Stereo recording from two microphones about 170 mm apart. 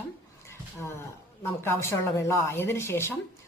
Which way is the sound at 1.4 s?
15° left (ahead or behind).